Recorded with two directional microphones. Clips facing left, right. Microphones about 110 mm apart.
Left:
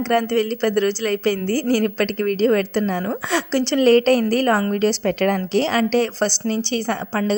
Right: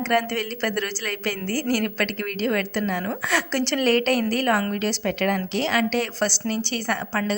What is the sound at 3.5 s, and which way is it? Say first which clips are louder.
Speech: left 8 dB; 20° left (ahead or behind).